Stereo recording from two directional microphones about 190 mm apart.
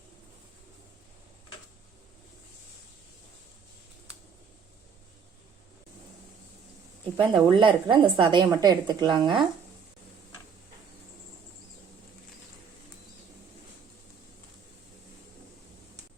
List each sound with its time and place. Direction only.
7.2 s a woman's voice: 25° right (ahead or behind)